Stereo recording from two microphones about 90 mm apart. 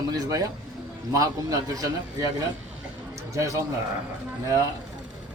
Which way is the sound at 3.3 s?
40° right (ahead or behind).